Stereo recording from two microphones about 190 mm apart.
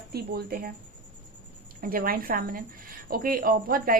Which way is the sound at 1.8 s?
50° right (ahead or behind).